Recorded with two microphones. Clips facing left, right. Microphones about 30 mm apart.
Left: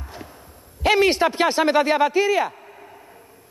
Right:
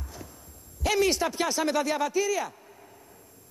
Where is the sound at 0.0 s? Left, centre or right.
Left.